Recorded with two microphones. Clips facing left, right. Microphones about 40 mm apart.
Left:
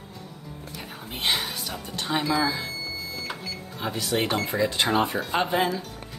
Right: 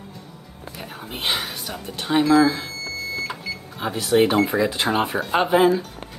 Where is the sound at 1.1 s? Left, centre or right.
Centre.